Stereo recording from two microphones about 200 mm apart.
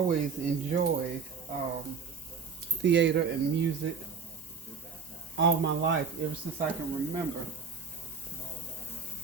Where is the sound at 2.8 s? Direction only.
60° right (ahead or behind).